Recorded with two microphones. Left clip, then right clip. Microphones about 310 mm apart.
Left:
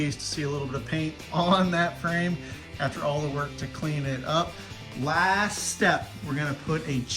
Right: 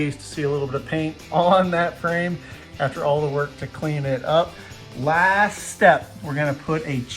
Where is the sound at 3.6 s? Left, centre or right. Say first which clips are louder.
Right 5 dB; centre.